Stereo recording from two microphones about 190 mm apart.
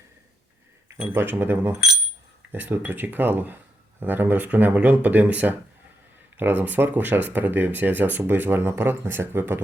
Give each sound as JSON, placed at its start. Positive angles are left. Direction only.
{"t": 1.1, "sound": "speech", "side_deg": -10}